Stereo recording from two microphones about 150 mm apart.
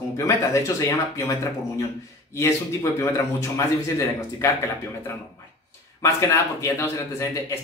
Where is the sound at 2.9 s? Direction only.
15° left (ahead or behind).